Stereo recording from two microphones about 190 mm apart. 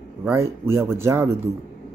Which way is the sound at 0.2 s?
15° right (ahead or behind).